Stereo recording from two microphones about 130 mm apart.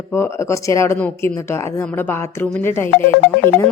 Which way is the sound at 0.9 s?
10° left (ahead or behind).